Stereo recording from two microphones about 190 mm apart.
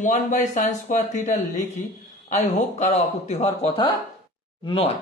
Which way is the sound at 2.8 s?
35° left (ahead or behind).